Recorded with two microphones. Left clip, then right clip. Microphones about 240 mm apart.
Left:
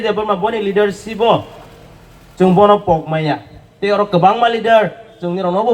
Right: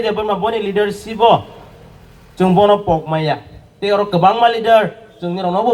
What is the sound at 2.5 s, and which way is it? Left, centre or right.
A man's voice, right.